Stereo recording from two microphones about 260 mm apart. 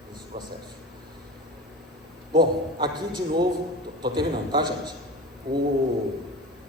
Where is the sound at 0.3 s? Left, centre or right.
Centre.